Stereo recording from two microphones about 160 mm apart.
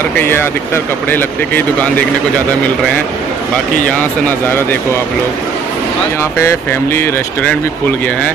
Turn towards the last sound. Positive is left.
turn(degrees=10)  # may be behind; listen again after turning